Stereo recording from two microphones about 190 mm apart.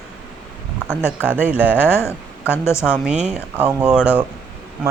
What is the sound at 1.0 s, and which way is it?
Speech, 10° right (ahead or behind).